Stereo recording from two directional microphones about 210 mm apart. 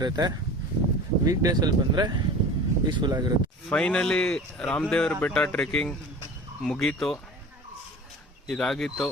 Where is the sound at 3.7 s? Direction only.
5° left (ahead or behind).